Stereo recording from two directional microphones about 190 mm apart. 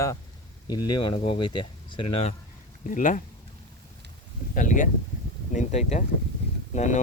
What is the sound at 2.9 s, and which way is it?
Speech, 45° left (ahead or behind).